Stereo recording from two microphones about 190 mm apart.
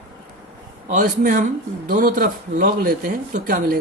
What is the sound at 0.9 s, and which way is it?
Speech, 45° right (ahead or behind).